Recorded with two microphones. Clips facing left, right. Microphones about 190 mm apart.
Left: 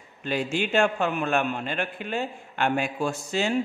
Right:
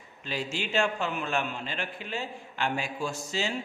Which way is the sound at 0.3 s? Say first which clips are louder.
Left 6 dB; 55° left (ahead or behind).